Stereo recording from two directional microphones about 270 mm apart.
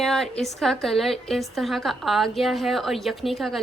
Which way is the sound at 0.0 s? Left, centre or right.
Centre.